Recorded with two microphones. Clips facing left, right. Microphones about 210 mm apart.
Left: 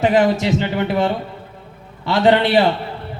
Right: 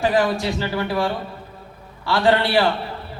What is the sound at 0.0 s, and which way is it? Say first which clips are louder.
A man's voice: left 4 dB; 20° left (ahead or behind).